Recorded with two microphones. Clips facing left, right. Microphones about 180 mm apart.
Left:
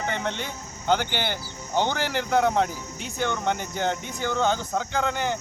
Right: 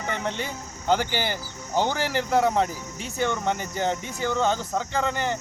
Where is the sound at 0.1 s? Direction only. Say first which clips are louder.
Even; 5° right (ahead or behind).